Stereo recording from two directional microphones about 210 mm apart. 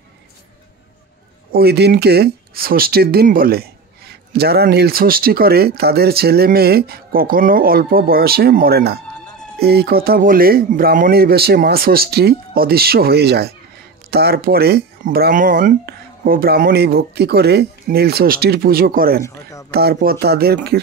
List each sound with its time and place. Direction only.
1.5 s speech: 50° right (ahead or behind)